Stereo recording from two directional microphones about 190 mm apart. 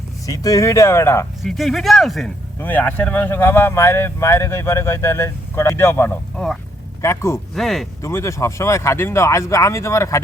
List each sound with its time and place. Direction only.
0.3 s speech: 15° left (ahead or behind)
1.4 s speech: centre (ahead or behind)
7.0 s speech: 15° left (ahead or behind)
7.5 s speech: centre (ahead or behind)
8.0 s speech: 15° left (ahead or behind)